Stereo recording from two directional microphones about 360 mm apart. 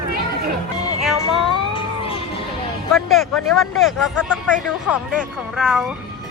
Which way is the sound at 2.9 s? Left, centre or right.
Centre.